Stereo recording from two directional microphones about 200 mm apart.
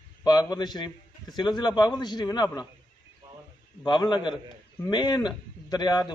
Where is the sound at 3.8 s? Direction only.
20° left (ahead or behind).